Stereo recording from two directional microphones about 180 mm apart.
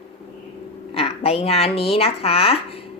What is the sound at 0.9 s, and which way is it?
Speech, 35° left (ahead or behind).